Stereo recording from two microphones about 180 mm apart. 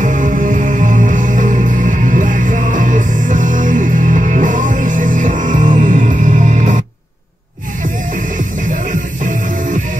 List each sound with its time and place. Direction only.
0.0 s music: 45° right (ahead or behind)
9.2 s music: 45° right (ahead or behind)